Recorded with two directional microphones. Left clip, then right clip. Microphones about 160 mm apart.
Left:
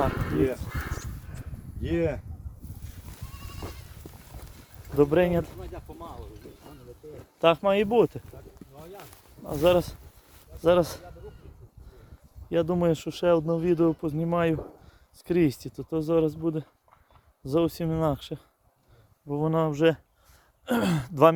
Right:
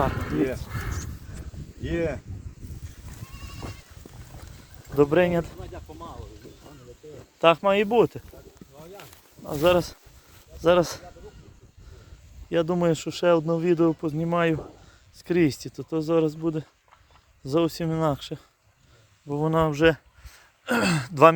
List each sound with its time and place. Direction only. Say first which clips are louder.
1.8 s speech: even; 60° left (ahead or behind)
4.9 s speech: right 2 dB; 5° right (ahead or behind)
5.5 s speech: right 1 dB; 20° left (ahead or behind)
7.4 s speech: right 2 dB; 5° right (ahead or behind)
8.8 s a sound: right 1 dB; 5° left (ahead or behind)
9.6 s speech: right 1 dB; 5° right (ahead or behind)
12.5 s speech: right 1 dB; centre (ahead or behind)